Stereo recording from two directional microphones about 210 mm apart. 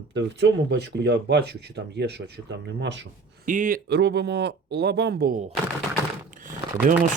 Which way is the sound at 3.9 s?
55° right (ahead or behind).